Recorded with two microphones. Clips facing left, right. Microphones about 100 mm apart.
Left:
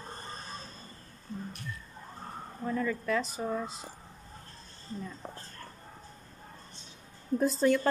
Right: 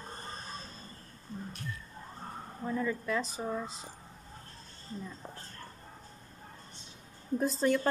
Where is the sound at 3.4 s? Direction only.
Centre (ahead or behind).